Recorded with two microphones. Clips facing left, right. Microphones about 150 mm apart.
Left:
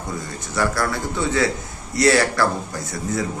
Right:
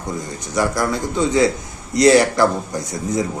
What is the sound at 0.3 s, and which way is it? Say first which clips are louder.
A man's voice: right 2 dB; 15° right (ahead or behind).